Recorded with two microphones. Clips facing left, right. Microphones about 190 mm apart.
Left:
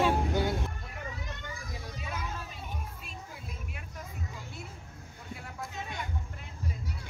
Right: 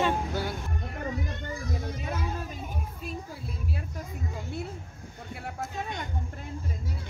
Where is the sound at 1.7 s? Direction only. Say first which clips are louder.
Right 5 dB; 50° right (ahead or behind).